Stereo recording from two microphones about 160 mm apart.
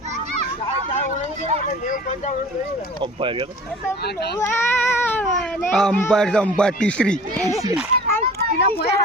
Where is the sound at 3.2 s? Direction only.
30° right (ahead or behind).